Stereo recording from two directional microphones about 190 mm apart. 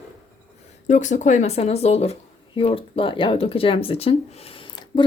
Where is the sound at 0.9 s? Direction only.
40° left (ahead or behind); by 5.0 s 25° left (ahead or behind).